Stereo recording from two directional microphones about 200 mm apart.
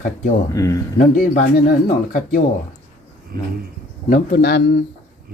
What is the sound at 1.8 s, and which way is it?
Speech, 45° left (ahead or behind).